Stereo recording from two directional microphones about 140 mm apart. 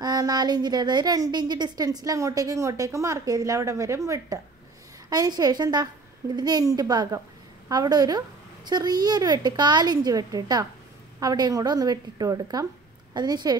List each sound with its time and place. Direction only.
0.0 s a woman's voice: 30° right (ahead or behind)